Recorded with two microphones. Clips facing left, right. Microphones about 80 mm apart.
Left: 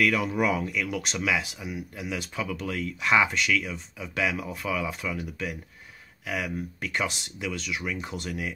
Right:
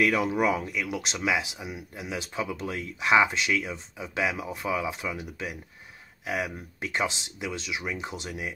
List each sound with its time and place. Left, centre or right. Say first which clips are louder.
0.0 s speech: right 1 dB; right
3.5 s speech: left 1 dB; right
4.0 s speech: even; right